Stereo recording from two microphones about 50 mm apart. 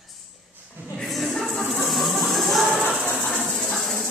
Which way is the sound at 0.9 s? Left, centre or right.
Centre.